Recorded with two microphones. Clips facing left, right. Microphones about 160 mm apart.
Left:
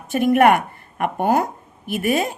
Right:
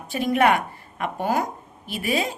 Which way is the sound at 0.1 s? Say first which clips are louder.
Left 5 dB; 55° left (ahead or behind).